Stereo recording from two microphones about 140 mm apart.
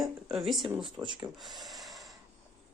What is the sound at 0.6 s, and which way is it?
Speech, 35° right (ahead or behind).